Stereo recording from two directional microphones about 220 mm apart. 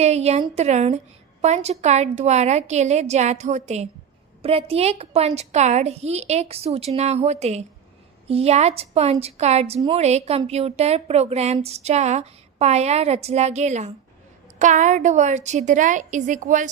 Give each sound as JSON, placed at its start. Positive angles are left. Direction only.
{"t": 0.0, "sound": "a woman's voice", "side_deg": -30}